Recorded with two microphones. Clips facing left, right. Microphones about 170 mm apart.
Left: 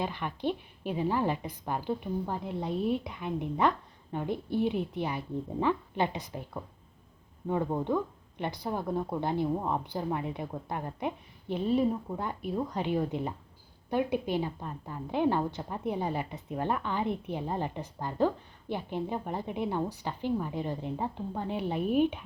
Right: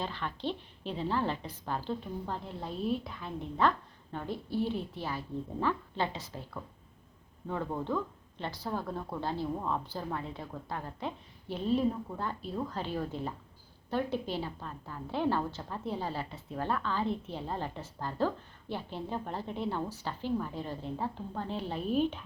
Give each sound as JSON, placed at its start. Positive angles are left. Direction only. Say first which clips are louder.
{"t": 0.0, "sound": "a woman's voice", "louder": "left 4 dB", "side_deg": 15}
{"t": 11.5, "sound": "a woman's voice", "louder": "left 2 dB", "side_deg": 5}